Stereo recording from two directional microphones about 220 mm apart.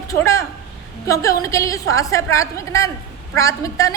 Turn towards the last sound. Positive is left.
turn(degrees=15)  # may be behind; listen again after turning